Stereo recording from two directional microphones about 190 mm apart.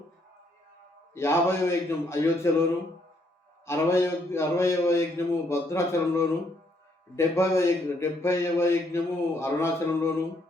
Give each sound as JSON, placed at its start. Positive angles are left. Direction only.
{"t": 1.1, "sound": "a man's voice", "side_deg": 15}
{"t": 3.7, "sound": "a man's voice", "side_deg": 15}